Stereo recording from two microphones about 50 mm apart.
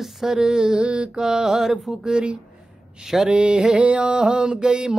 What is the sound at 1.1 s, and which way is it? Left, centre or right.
Music, centre.